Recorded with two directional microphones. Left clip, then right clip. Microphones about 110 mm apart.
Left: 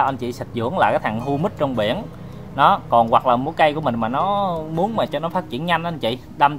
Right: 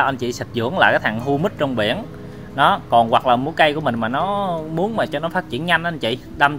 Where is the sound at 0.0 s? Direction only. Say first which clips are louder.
Right 1 dB; 25° right (ahead or behind).